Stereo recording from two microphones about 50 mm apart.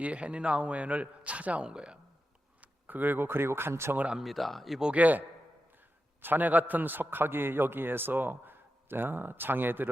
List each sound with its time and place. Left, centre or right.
0.0 s a man's voice: right
2.6 s speech: right
4.2 s speech: centre
4.9 s a man's voice: right
6.2 s a man's voice: right